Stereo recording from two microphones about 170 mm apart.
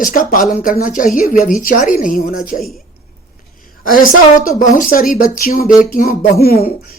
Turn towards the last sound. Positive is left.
turn(degrees=60)  # may be behind; listen again after turning